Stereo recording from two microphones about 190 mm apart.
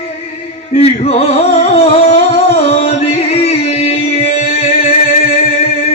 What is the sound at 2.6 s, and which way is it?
Music, 35° left (ahead or behind).